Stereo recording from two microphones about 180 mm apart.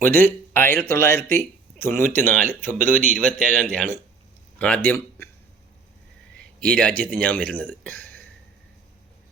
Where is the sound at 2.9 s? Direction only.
45° right (ahead or behind).